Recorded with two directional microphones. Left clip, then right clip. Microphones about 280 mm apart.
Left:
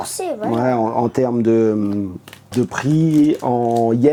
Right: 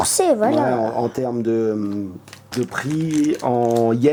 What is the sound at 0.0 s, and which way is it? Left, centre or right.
Speech, right.